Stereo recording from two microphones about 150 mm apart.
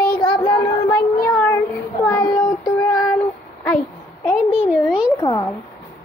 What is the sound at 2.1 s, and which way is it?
Child singing, 25° left (ahead or behind).